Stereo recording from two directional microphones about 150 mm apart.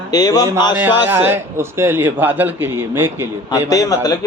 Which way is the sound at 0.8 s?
10° right (ahead or behind).